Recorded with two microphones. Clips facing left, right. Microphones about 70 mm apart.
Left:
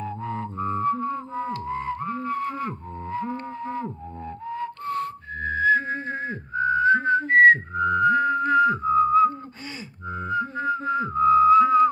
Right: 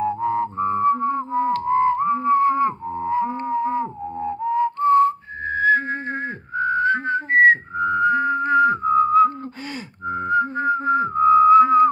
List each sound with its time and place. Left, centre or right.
0.0 s music: right
4.2 s whistling: centre
5.5 s whistling: right
8.8 s whistling: right
10.0 s whistling: right